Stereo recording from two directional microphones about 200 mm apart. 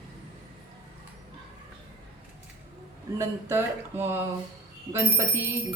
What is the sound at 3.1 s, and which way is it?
Speech, 10° right (ahead or behind).